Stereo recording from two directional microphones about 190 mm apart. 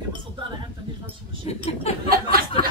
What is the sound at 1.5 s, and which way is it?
Speech, 35° left (ahead or behind).